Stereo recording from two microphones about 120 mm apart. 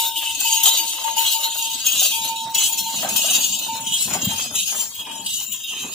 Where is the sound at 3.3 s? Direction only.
Centre (ahead or behind).